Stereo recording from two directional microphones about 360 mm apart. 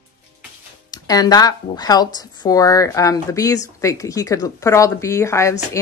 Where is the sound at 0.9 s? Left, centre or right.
Centre.